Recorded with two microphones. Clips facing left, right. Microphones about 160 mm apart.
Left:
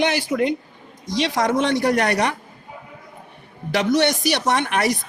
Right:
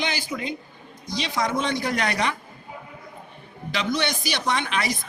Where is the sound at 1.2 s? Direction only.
80° left.